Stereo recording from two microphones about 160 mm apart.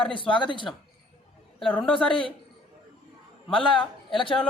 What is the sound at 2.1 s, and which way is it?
Speech, 35° left (ahead or behind).